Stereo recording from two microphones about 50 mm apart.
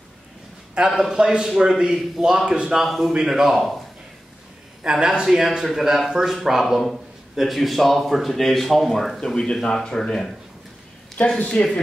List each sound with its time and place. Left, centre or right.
0.7 s a man's voice: centre
2.8 s speech: centre
3.1 s a man's voice: centre
4.8 s speech: centre
11.2 s speech: left